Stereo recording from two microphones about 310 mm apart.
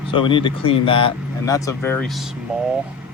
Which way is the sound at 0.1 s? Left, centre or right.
Centre.